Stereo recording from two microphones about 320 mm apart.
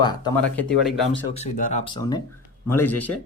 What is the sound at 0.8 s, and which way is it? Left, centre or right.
Speech, centre.